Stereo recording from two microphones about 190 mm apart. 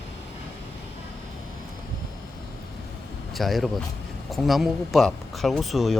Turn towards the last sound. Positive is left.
turn(degrees=0)  # may be behind; listen again after turning